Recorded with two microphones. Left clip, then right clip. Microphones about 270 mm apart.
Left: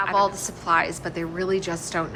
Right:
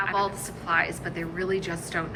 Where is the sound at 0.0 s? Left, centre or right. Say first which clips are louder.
Left 5 dB; centre.